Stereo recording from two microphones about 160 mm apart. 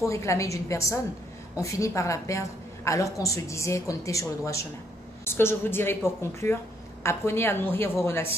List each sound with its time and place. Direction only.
0.1 s a woman's voice: 20° left (ahead or behind)